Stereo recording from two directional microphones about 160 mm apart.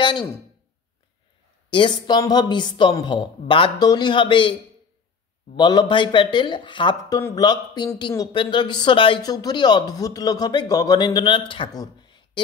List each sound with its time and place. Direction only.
0.0 s speech: 30° left (ahead or behind)
1.7 s speech: 30° left (ahead or behind)
5.6 s speech: 25° left (ahead or behind)